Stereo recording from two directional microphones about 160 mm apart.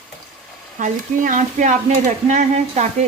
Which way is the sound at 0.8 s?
55° right (ahead or behind).